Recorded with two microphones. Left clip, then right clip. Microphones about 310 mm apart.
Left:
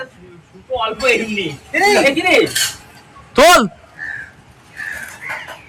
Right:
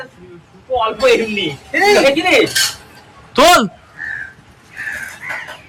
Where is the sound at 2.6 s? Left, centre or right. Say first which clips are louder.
Right 3 dB; right.